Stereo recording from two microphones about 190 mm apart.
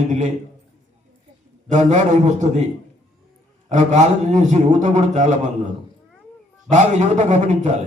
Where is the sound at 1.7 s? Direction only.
40° right (ahead or behind).